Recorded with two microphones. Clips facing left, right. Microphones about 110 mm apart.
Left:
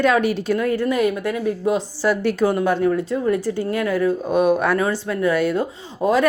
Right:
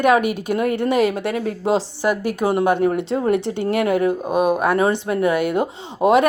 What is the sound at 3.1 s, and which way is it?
Speech, 50° right (ahead or behind).